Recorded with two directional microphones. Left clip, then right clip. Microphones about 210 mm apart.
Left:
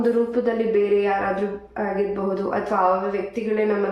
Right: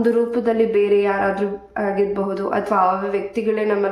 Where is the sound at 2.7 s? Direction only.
35° right (ahead or behind).